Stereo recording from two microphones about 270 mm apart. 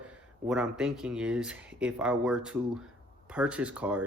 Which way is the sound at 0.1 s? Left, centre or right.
Centre.